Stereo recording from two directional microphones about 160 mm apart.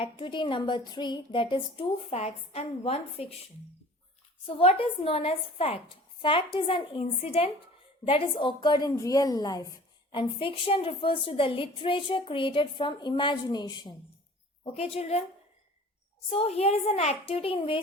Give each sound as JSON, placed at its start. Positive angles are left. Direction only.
{"t": 0.0, "sound": "a woman's voice", "side_deg": 30}
{"t": 4.4, "sound": "a woman's voice", "side_deg": 35}
{"t": 14.7, "sound": "a woman's voice", "side_deg": 40}
{"t": 16.3, "sound": "a woman's voice", "side_deg": 40}